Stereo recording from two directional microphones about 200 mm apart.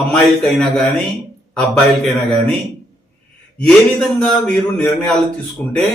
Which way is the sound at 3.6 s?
5° left (ahead or behind).